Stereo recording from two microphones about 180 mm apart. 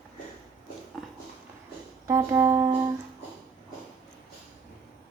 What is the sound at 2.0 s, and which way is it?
Music, 15° right (ahead or behind).